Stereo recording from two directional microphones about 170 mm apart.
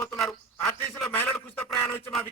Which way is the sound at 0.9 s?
5° left (ahead or behind).